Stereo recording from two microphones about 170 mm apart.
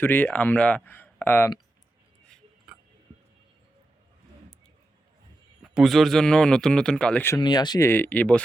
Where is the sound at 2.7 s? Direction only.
5° right (ahead or behind).